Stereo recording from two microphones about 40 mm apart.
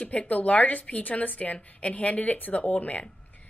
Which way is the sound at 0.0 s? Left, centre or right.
Left.